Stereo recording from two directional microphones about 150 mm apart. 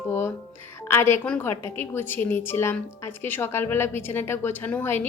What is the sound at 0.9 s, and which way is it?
A woman's voice, 15° left (ahead or behind).